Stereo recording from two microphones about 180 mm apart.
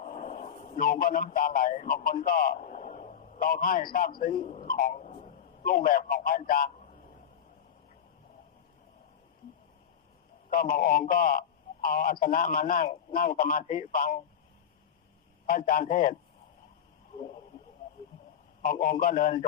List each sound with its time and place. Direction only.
0.0 s radio: 40° left (ahead or behind)
3.9 s a man's voice: 50° left (ahead or behind)
10.5 s a man's voice: 50° left (ahead or behind)
15.4 s a man's voice: 50° left (ahead or behind)
18.6 s a man's voice: 50° left (ahead or behind)